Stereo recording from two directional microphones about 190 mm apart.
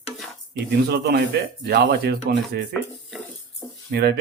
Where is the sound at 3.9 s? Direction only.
60° right (ahead or behind).